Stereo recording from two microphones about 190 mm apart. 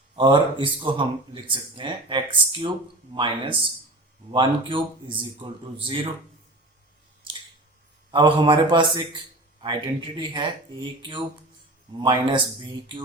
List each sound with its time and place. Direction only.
0.2 s speech: 25° right (ahead or behind)
8.1 s speech: 25° right (ahead or behind)